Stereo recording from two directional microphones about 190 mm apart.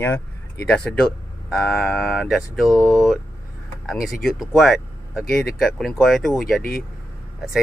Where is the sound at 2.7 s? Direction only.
15° left (ahead or behind).